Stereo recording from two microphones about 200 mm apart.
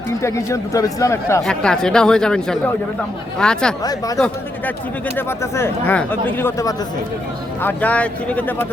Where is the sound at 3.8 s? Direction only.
20° left (ahead or behind).